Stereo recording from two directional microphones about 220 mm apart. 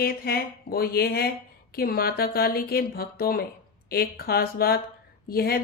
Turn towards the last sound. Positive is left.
turn(degrees=45)  # may be behind; listen again after turning